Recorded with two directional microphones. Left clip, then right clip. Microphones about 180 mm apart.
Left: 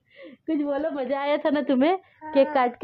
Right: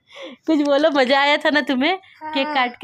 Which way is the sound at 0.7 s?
75° right (ahead or behind).